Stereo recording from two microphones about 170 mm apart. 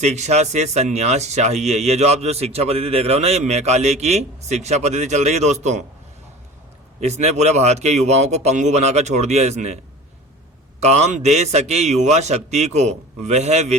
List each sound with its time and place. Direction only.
0.0 s speech: 40° right (ahead or behind)
7.0 s speech: 40° right (ahead or behind)
10.8 s speech: 40° right (ahead or behind)